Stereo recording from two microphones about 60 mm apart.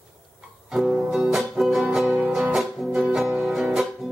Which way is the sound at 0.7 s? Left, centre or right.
Centre.